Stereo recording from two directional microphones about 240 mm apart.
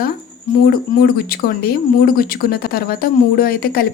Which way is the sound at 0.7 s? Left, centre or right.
Left.